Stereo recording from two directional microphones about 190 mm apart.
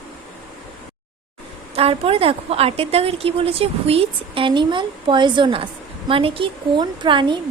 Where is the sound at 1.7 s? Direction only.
30° right (ahead or behind).